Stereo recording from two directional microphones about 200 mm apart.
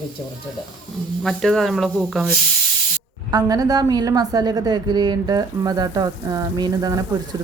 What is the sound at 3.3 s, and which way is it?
Speech, 20° right (ahead or behind).